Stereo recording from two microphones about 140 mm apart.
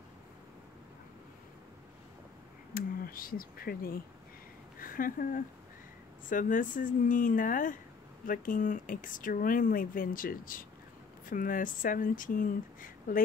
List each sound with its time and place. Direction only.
2.7 s speech: 90° left
11.2 s speech: 75° left (ahead or behind)